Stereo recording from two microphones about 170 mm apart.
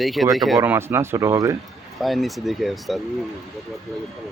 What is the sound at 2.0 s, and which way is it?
Speech, centre (ahead or behind).